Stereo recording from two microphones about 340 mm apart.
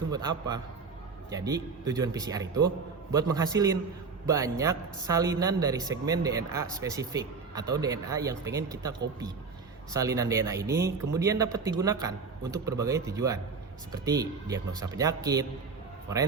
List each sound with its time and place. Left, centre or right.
0.1 s speech: centre
9.9 s speech: centre